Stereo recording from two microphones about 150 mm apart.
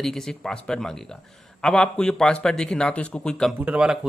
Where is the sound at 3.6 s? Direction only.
5° right (ahead or behind).